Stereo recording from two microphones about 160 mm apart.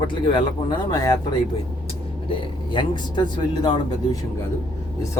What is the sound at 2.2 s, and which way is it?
Speech, 30° left (ahead or behind).